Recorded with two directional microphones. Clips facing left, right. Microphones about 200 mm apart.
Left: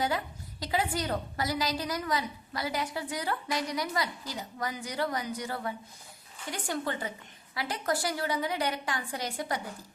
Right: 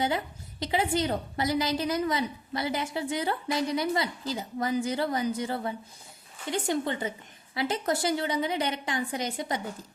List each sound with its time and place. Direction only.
0.6 s a woman's voice: 25° right (ahead or behind)